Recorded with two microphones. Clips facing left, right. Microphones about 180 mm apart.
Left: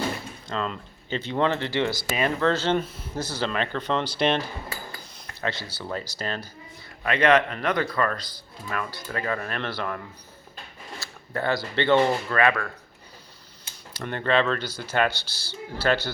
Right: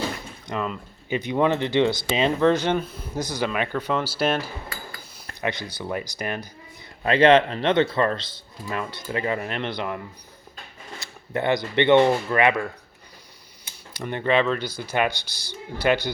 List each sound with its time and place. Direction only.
0.4 s speech: 15° right (ahead or behind)
2.7 s speech: centre (ahead or behind)
3.2 s speech: 15° right (ahead or behind)
5.4 s speech: 15° right (ahead or behind)
7.0 s speech: 30° right (ahead or behind)
11.0 s speech: 20° right (ahead or behind)